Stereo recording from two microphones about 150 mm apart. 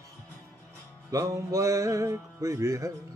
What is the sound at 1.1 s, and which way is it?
Music, 20° right (ahead or behind).